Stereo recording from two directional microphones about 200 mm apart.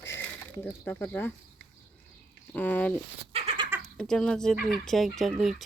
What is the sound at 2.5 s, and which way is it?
Speech, 10° left (ahead or behind).